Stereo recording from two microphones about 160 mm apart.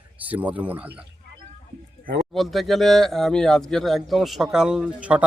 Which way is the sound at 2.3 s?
Centre (ahead or behind).